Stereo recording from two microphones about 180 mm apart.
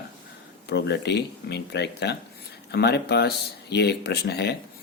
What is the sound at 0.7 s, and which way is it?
Speech, 70° left (ahead or behind).